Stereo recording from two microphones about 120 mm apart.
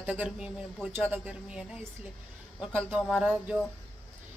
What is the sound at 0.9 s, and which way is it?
Speech, 15° right (ahead or behind).